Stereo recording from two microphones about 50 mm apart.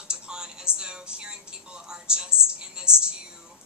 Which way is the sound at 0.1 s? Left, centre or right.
Centre.